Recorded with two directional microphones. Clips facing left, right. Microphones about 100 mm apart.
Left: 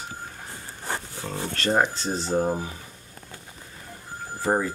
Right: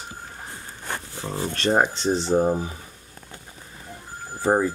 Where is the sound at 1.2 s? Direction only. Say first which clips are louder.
Right 3 dB; 15° right (ahead or behind).